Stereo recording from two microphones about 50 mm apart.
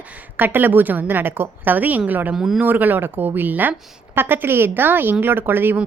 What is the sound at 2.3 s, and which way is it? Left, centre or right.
Speech, centre.